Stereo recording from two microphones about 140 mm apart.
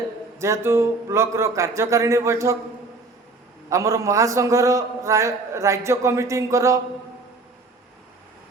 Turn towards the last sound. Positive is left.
turn(degrees=-20)  # may be behind; listen again after turning